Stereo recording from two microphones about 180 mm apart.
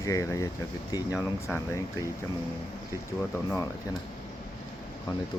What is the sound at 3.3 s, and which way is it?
Speech, 15° left (ahead or behind).